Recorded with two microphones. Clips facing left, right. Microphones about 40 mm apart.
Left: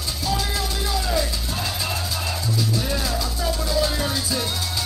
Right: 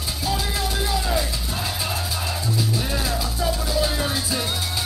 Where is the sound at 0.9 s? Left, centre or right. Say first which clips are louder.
Left 2 dB; centre.